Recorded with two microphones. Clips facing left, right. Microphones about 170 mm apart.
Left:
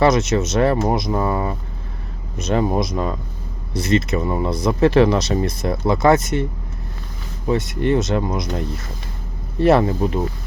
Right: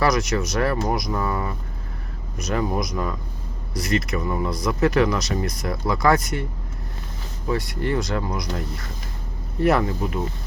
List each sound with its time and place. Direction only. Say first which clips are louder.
0.0 s speech: left 5 dB; 25° left (ahead or behind)
7.4 s speech: left 5 dB; 20° left (ahead or behind)